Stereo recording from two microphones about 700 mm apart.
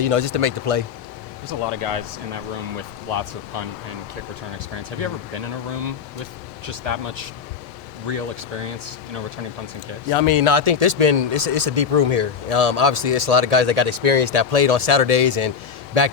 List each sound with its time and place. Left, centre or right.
0.0 s speech: right
4.9 s speech: right
6.7 s speech: right
10.1 s speech: right